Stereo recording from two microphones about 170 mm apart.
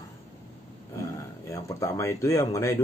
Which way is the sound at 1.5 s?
20° left (ahead or behind).